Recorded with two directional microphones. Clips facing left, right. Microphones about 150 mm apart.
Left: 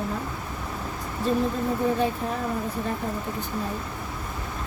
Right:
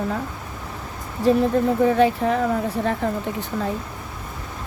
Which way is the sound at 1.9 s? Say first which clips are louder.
Right 8 dB; 90° right.